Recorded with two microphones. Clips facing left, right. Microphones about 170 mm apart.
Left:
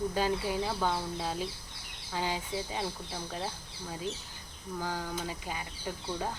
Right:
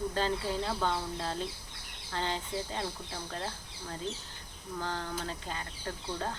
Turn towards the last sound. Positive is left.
turn(degrees=10)  # may be behind; listen again after turning